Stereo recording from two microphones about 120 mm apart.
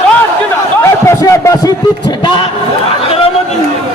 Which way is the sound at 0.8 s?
25° left (ahead or behind).